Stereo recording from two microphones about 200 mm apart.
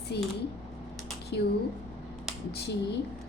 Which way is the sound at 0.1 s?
55° left (ahead or behind).